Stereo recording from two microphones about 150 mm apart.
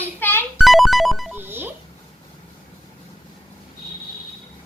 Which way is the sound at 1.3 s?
15° right (ahead or behind).